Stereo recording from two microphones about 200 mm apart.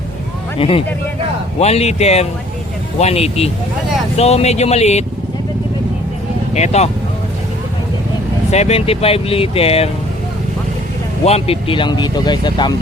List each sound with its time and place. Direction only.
0.6 s speech: 30° left (ahead or behind)
6.5 s speech: 35° left (ahead or behind)
8.4 s speech: 35° left (ahead or behind)
11.3 s speech: 30° left (ahead or behind)